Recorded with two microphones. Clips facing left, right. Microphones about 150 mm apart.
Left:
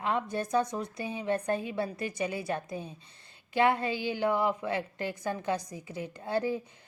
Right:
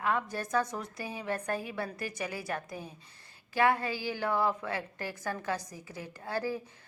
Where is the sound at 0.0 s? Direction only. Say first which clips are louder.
Left 1 dB; 20° left (ahead or behind).